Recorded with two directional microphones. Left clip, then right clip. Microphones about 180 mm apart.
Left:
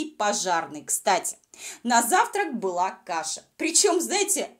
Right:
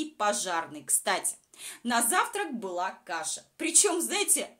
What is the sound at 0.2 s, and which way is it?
A woman's voice, 20° left (ahead or behind).